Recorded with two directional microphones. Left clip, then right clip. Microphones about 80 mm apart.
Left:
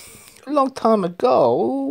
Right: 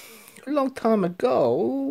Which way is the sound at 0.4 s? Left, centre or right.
Left.